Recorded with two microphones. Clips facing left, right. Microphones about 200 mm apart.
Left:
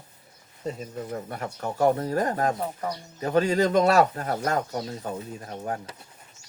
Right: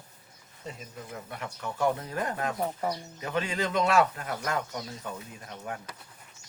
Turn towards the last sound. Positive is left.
turn(degrees=35)  # may be behind; listen again after turning